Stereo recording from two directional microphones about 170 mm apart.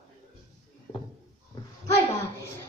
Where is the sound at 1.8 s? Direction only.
15° left (ahead or behind).